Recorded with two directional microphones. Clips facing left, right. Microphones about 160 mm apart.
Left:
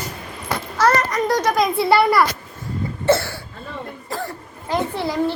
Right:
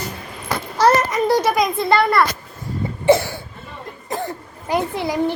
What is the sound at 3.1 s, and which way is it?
Cough, 15° right (ahead or behind).